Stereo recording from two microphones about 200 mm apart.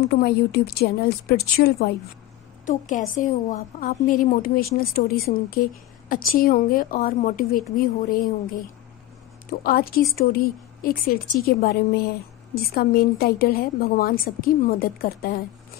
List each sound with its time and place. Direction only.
0.1 s a woman's voice: 55° left (ahead or behind)
2.6 s a woman's voice: 40° left (ahead or behind)